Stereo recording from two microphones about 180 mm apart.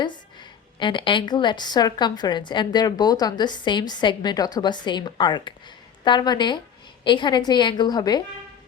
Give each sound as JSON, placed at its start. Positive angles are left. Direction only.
{"t": 0.8, "sound": "a woman's voice", "side_deg": 25}